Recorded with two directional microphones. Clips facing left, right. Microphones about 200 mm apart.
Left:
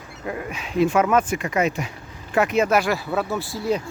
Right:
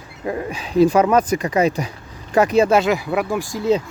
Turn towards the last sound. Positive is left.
turn(degrees=-20)  # may be behind; listen again after turning